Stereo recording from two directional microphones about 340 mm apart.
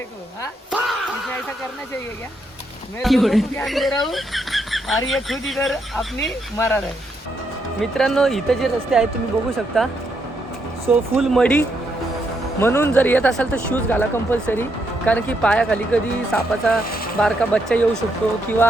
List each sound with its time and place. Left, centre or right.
3.0 s speech: centre